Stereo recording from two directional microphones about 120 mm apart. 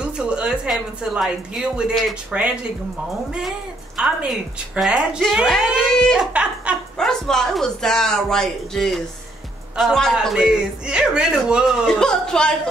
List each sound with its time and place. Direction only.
0.0 s speech: 10° right (ahead or behind)
3.3 s a woman's voice: 5° right (ahead or behind)
6.1 s speech: 10° right (ahead or behind)
7.0 s a woman's voice: 5° left (ahead or behind)